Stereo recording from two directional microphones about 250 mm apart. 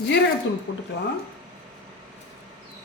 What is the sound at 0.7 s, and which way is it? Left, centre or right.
Speech, left.